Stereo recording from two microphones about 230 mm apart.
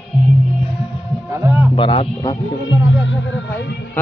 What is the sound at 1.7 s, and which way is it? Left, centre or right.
Speech, left.